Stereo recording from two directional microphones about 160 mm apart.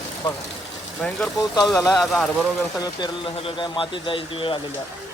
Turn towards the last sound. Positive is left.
turn(degrees=35)  # may be behind; listen again after turning